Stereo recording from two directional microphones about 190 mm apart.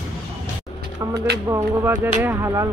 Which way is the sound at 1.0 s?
20° right (ahead or behind).